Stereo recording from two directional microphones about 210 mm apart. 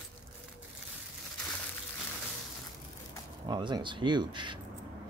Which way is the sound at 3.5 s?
20° right (ahead or behind).